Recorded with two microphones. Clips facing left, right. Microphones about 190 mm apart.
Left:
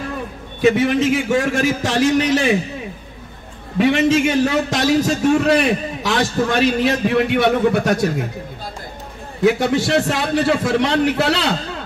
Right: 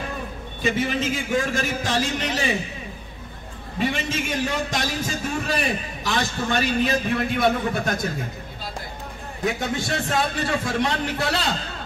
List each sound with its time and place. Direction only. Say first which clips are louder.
0.6 s a man's voice: left 9 dB; 70° left (ahead or behind)
3.7 s a man's voice: left 11 dB; 75° left (ahead or behind)
9.4 s a man's voice: left 10 dB; 75° left (ahead or behind)